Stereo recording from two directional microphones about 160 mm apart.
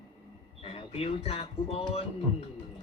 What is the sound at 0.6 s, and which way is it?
Speech, 35° left (ahead or behind).